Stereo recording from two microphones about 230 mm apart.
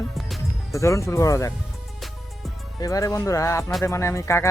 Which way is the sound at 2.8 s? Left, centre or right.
Centre.